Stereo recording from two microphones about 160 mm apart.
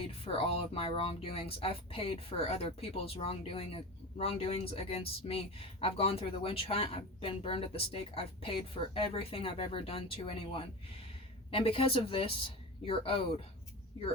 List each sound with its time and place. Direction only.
0.0 s speech: 35° left (ahead or behind)